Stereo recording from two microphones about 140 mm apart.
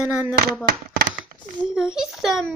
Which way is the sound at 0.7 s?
90° right.